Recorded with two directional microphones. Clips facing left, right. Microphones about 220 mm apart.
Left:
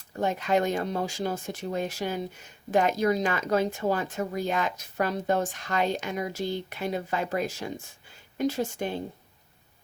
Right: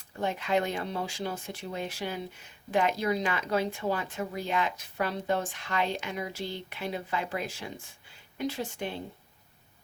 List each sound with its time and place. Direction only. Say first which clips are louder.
0.2 s speech: left 3 dB; 45° left (ahead or behind)